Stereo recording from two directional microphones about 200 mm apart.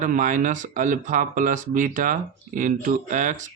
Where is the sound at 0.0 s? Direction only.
40° right (ahead or behind).